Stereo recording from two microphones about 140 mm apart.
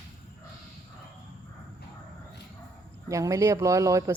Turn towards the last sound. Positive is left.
turn(degrees=-25)  # may be behind; listen again after turning